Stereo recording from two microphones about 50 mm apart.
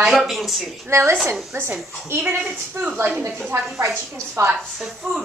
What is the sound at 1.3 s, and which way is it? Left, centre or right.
Speech, right.